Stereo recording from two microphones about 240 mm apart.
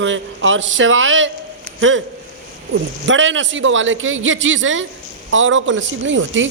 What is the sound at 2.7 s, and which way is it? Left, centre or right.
A woman's voice, right.